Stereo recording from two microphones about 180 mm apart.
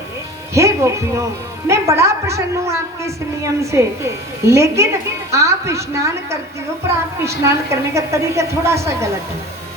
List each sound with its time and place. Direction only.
0.5 s speech: 15° right (ahead or behind)
7.3 s speech: 15° right (ahead or behind)